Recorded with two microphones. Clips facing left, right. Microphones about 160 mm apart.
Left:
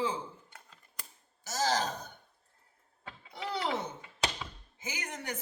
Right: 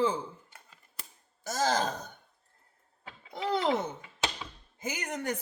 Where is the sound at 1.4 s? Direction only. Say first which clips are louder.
Right 2 dB; 50° right (ahead or behind).